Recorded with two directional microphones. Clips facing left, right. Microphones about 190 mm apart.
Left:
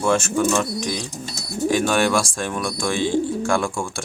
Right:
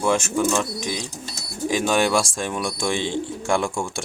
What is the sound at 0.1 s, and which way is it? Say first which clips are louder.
Speech: left 2 dB; 15° right (ahead or behind).